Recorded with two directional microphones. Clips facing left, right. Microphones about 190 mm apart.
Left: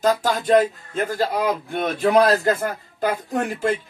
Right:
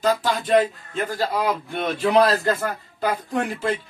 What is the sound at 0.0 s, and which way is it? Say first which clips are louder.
A man's voice: left 2 dB; 40° left (ahead or behind).